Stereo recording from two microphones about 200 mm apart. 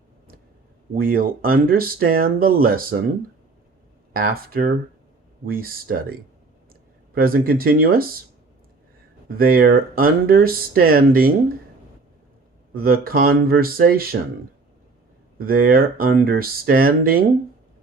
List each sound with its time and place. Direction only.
0.9 s speech: 45° right (ahead or behind)
4.1 s speech: 45° right (ahead or behind)
9.4 s speech: 45° right (ahead or behind)
12.7 s speech: 50° right (ahead or behind)
15.4 s speech: 45° right (ahead or behind)